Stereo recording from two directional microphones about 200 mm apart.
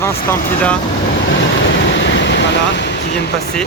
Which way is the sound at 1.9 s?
65° left (ahead or behind).